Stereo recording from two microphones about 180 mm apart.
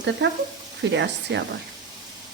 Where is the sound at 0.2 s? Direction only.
75° right (ahead or behind).